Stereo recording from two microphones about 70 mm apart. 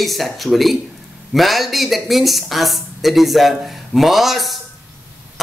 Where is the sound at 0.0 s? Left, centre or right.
Centre.